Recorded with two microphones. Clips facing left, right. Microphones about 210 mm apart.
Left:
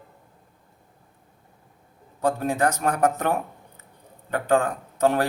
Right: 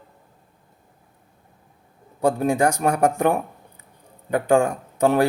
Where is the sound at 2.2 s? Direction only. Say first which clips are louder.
Right 4 dB; 10° right (ahead or behind).